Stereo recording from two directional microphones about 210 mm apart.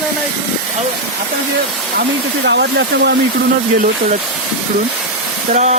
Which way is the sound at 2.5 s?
55° right (ahead or behind).